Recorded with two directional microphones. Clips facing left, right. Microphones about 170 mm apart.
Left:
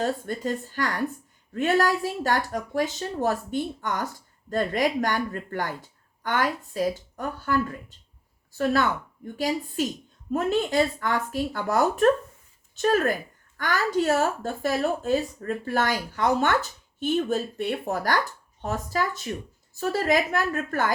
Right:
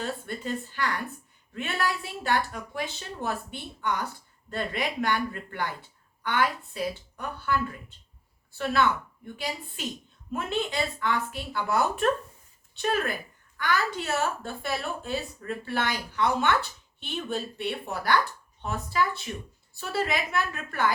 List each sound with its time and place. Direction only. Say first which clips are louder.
0.0 s speech: left 6 dB; 45° left (ahead or behind)